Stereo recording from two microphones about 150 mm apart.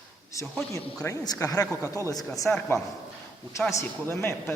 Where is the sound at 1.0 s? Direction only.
25° left (ahead or behind).